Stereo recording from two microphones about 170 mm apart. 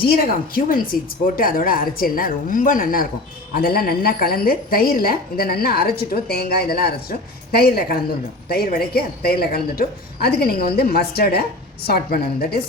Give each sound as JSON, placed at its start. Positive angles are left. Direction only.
{"t": 0.5, "sound": "a woman's voice", "side_deg": 55}